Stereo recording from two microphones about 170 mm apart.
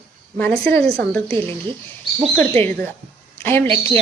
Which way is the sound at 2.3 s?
10° left (ahead or behind).